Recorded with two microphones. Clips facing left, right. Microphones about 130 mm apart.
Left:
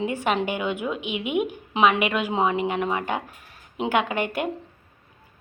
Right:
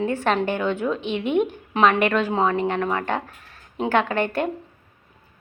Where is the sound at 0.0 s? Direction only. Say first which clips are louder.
Right 2 dB; 15° left (ahead or behind).